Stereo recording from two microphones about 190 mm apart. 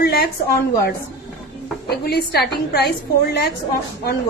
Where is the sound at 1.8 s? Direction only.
55° left (ahead or behind).